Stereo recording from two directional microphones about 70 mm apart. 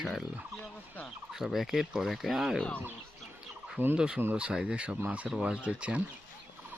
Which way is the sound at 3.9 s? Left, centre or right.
Centre.